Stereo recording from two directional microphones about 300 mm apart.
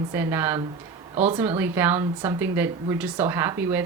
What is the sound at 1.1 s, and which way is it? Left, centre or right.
Speech, right.